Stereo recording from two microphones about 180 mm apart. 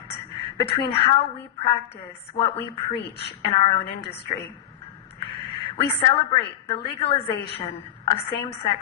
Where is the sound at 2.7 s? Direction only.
35° left (ahead or behind).